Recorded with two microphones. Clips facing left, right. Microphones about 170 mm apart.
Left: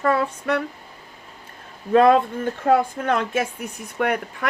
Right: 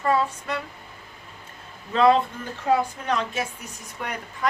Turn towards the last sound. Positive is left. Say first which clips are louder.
# left 9 dB
turn(degrees=65)  # may be behind; listen again after turning